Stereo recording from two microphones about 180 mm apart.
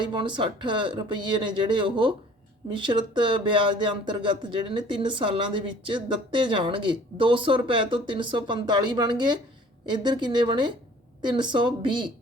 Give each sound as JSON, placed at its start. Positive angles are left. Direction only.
{"t": 0.0, "sound": "speech", "side_deg": -25}